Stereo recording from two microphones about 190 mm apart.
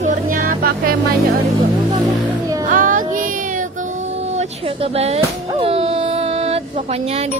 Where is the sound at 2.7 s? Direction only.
45° right (ahead or behind).